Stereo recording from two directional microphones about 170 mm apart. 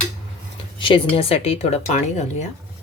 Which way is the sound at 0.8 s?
30° left (ahead or behind).